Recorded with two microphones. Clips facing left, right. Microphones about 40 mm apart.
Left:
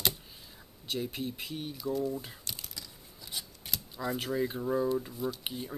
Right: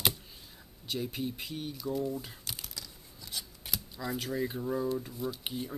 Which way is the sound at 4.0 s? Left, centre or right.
Centre.